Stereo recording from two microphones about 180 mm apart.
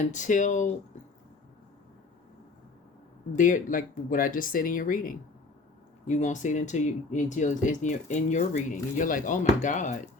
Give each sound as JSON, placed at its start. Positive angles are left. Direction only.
{"t": 0.0, "sound": "speech", "side_deg": 45}
{"t": 3.3, "sound": "speech", "side_deg": 45}